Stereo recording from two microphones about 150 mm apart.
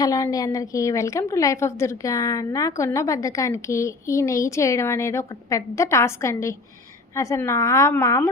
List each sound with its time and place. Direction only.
0.0 s a woman's voice: 25° left (ahead or behind)